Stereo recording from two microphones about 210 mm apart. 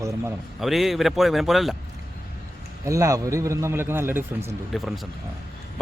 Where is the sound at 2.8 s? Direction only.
15° right (ahead or behind).